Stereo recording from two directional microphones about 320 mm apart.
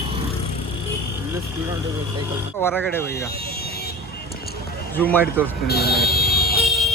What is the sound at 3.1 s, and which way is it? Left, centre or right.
Speech, left.